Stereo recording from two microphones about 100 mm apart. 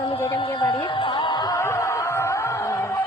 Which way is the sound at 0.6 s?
50° left (ahead or behind).